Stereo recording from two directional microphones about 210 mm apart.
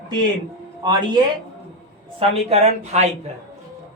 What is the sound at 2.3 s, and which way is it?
Speech, 30° right (ahead or behind).